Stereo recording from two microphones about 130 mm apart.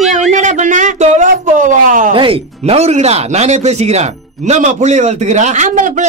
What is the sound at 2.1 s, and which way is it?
Speech, 45° right (ahead or behind).